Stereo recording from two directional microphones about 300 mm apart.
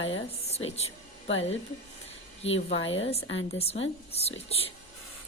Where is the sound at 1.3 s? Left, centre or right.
Left.